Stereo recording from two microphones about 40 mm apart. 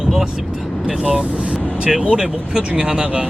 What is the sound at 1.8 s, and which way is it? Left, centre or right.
Speech, right.